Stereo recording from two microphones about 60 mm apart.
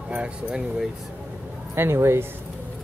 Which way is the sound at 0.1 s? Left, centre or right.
Centre.